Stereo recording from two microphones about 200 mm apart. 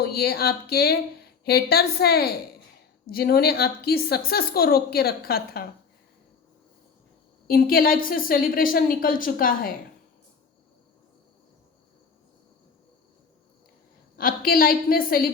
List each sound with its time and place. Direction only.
0.0 s a woman's voice: 50° left (ahead or behind)
7.4 s a woman's voice: 45° left (ahead or behind)
14.2 s a woman's voice: 45° left (ahead or behind)